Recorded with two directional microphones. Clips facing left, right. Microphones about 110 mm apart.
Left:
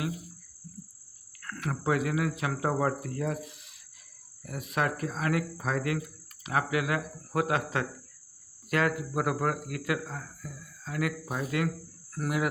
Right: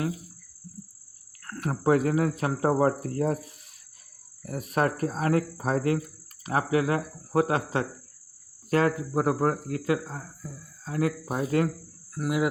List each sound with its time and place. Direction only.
1.4 s speech: 35° right (ahead or behind)
12.2 s speech: 5° right (ahead or behind)